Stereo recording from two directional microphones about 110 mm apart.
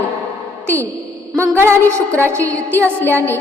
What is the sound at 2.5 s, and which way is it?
Speech, 15° left (ahead or behind).